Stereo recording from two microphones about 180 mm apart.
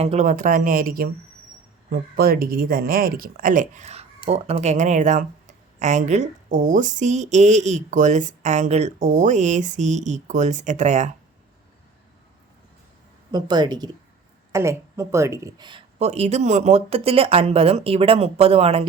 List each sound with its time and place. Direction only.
0.0 s speech: 40° right (ahead or behind)
13.3 s speech: 20° right (ahead or behind)